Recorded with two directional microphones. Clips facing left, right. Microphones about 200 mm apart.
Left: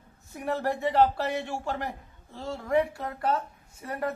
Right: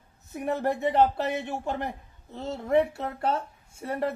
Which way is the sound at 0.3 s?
20° right (ahead or behind).